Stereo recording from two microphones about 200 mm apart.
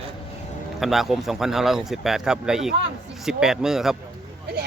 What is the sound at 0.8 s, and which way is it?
Speech, centre (ahead or behind).